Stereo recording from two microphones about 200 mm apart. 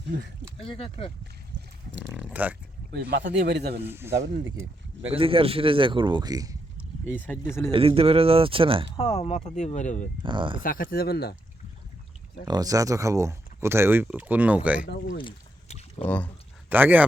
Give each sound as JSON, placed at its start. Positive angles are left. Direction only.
{"t": 0.6, "sound": "speech", "side_deg": 30}
{"t": 2.0, "sound": "speech", "side_deg": -5}
{"t": 3.1, "sound": "a man's voice", "side_deg": -55}
{"t": 3.8, "sound": "speech", "side_deg": -10}
{"t": 4.1, "sound": "speech", "side_deg": -35}
{"t": 7.7, "sound": "speech", "side_deg": -30}
{"t": 9.0, "sound": "speech", "side_deg": 30}
{"t": 10.2, "sound": "speech", "side_deg": -25}
{"t": 10.6, "sound": "speech", "side_deg": 45}
{"t": 12.5, "sound": "speech", "side_deg": -20}
{"t": 14.8, "sound": "speech", "side_deg": 55}
{"t": 16.0, "sound": "speech", "side_deg": 10}
{"t": 16.6, "sound": "speech", "side_deg": -10}